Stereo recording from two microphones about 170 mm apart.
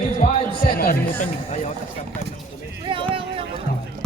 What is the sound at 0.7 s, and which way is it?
Speech, 55° left (ahead or behind).